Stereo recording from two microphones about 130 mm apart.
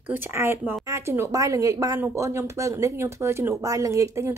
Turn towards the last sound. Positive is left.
turn(degrees=-25)  # may be behind; listen again after turning